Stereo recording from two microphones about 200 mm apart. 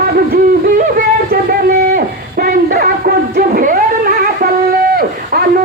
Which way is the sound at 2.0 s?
50° right (ahead or behind).